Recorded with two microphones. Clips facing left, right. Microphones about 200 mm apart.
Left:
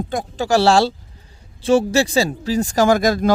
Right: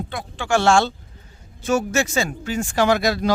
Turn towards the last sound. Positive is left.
turn(degrees=45)  # may be behind; listen again after turning